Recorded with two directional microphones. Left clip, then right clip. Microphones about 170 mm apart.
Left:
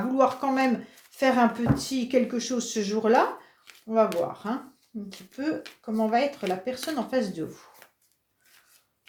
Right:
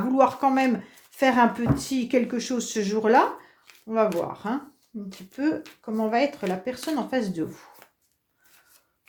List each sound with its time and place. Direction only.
0.1 s speech: 45° right (ahead or behind)